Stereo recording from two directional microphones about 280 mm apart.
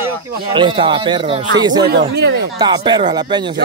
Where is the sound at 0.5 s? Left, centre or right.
Centre.